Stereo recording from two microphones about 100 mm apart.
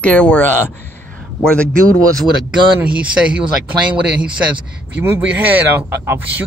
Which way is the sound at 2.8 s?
10° right (ahead or behind).